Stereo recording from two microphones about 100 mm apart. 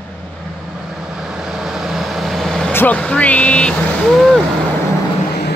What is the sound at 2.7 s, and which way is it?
Vehicle, 20° left (ahead or behind).